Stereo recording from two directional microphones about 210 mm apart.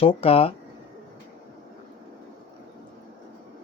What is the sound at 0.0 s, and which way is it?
Speech, 25° left (ahead or behind).